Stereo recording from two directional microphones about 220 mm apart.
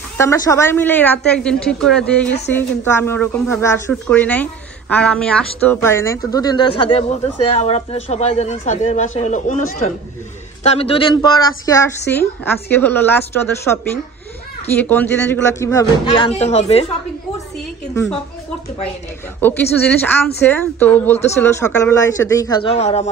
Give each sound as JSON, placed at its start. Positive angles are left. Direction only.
{"t": 0.2, "sound": "a woman's voice", "side_deg": 15}
{"t": 19.4, "sound": "speech", "side_deg": 10}